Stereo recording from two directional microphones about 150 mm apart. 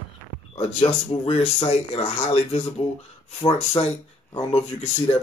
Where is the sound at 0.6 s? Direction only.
40° left (ahead or behind).